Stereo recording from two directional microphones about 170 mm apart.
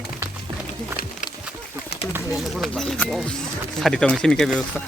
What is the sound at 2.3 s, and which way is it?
Speech, centre (ahead or behind).